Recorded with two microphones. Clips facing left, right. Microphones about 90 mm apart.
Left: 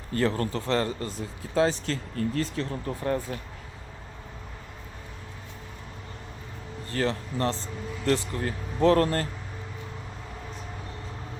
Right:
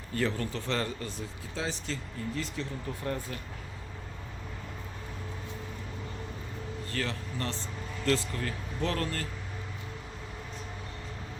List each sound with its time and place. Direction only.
0.1 s speech: 45° left (ahead or behind)
1.5 s speech: 55° left (ahead or behind)
2.4 s speech: 45° left (ahead or behind)
6.9 s speech: 35° left (ahead or behind)
8.0 s speech: 20° left (ahead or behind)
8.4 s speech: 35° left (ahead or behind)